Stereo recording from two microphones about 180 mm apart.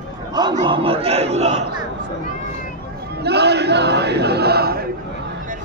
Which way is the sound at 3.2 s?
65° right (ahead or behind).